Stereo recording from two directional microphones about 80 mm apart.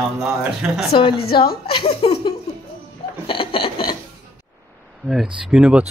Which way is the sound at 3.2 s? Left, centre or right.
Left.